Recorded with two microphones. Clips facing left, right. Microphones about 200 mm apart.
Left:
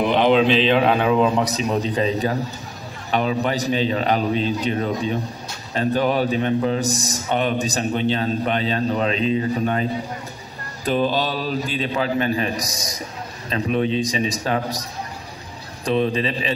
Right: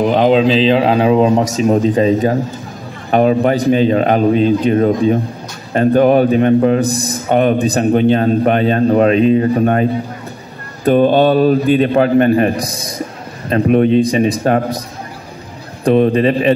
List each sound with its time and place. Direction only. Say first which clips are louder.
0.1 s a man's voice: right 3 dB; 40° right (ahead or behind); by 14.8 s 55° right (ahead or behind)
15.8 s a man's voice: right 9 dB; 55° right (ahead or behind)